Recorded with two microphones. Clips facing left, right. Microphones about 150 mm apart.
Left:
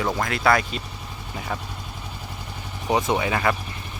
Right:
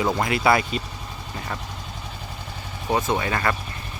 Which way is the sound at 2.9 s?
20° left (ahead or behind).